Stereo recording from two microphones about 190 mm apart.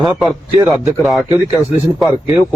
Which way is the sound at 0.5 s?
20° right (ahead or behind).